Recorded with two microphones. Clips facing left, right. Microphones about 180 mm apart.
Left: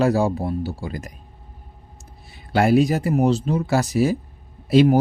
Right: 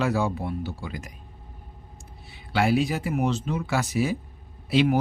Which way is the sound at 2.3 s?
45° left (ahead or behind).